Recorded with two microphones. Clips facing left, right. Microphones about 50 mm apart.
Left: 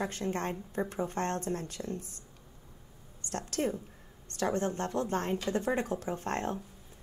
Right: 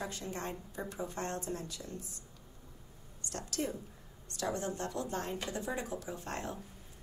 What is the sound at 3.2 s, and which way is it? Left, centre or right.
A woman's voice, left.